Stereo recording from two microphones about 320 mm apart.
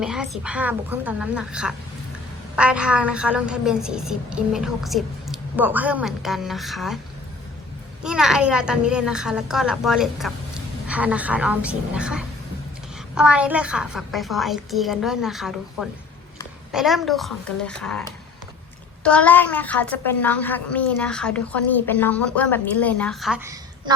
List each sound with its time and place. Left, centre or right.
0.0 s a woman's voice: centre
8.0 s a woman's voice: centre
19.0 s a woman's voice: centre